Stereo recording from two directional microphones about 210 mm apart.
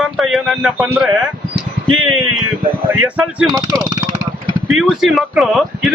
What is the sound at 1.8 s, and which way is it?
Speech, 80° right.